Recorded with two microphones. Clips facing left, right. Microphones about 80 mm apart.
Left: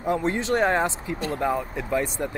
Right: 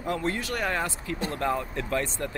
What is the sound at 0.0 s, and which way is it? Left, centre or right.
Speech, left.